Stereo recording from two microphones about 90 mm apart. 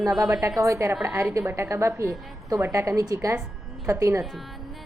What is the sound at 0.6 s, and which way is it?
A woman's voice, 35° right (ahead or behind).